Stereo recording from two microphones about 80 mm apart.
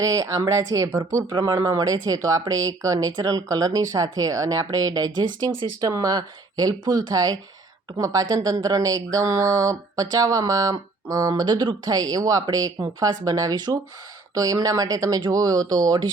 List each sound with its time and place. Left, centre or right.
0.0 s speech: right
11.4 s speech: right